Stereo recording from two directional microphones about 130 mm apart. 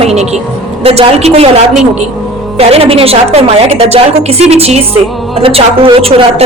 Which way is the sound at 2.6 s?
50° right (ahead or behind).